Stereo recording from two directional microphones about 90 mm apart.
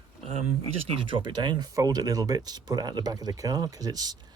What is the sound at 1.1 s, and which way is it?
Speech, 65° right (ahead or behind).